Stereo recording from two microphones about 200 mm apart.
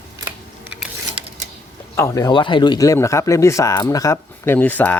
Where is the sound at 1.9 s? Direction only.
15° left (ahead or behind).